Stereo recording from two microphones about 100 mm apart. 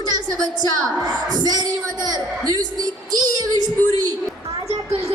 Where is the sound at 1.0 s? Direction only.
40° right (ahead or behind).